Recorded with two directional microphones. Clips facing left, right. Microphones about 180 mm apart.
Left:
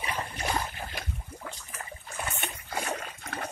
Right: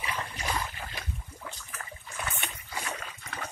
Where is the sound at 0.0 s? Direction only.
25° left (ahead or behind).